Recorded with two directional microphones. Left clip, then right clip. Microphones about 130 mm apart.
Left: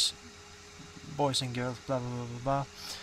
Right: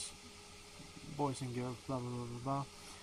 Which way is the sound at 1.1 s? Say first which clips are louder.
Left 9 dB; 20° left (ahead or behind).